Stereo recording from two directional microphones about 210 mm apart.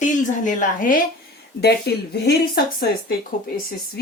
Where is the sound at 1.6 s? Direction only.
50° left (ahead or behind).